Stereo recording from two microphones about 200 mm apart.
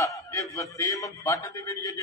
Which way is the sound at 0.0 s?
15° left (ahead or behind).